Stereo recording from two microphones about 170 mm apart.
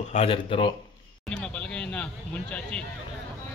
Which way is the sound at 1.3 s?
5° left (ahead or behind).